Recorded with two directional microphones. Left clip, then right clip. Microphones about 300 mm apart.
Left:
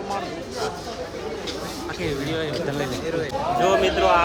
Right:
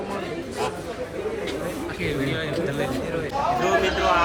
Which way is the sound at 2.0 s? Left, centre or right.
Left.